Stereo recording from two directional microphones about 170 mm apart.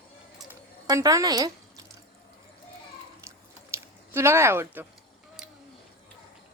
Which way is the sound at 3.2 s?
15° right (ahead or behind).